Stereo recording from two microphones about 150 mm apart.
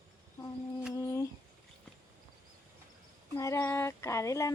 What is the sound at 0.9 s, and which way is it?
Speech, 25° left (ahead or behind).